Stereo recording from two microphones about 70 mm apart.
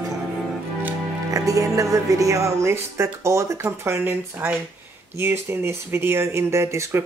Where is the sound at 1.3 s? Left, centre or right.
Right.